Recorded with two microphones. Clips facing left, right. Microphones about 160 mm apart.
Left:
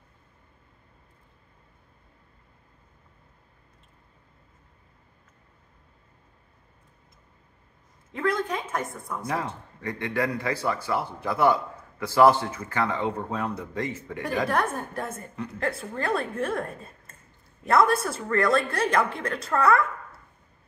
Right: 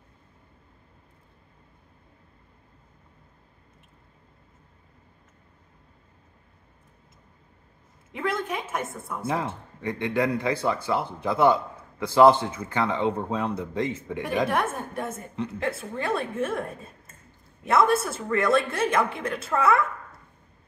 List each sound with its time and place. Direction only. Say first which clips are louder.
8.1 s a woman's voice: left 2 dB; 5° right (ahead or behind)
9.2 s speech: right 2 dB; 25° right (ahead or behind)
14.5 s a woman's voice: even; centre (ahead or behind)
17.6 s a woman's voice: even; centre (ahead or behind)